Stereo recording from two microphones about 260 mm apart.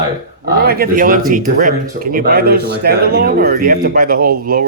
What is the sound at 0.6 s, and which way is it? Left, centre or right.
Speech, right.